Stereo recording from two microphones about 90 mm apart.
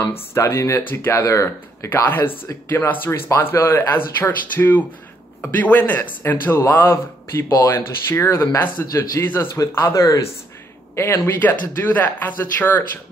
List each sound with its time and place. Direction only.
0.0 s speech: 30° left (ahead or behind)
2.0 s a man's voice: 25° left (ahead or behind)
11.0 s speech: 20° left (ahead or behind)